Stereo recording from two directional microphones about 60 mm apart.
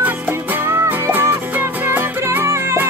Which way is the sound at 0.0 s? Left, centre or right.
Right.